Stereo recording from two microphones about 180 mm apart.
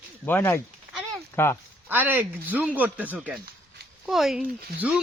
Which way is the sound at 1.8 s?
10° right (ahead or behind).